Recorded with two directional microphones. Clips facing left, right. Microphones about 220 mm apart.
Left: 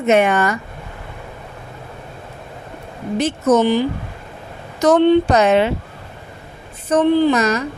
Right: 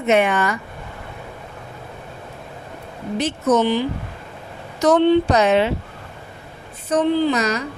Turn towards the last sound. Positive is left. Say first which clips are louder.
# left 4 dB
turn(degrees=50)  # may be behind; listen again after turning